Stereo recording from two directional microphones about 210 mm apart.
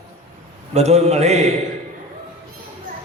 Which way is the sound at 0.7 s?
30° right (ahead or behind).